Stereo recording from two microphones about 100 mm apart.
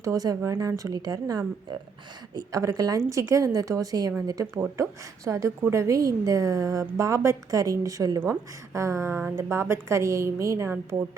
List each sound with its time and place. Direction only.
0.0 s a woman's voice: 35° right (ahead or behind)